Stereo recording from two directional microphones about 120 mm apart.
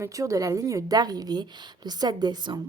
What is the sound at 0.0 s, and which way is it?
A woman's voice, 25° right (ahead or behind).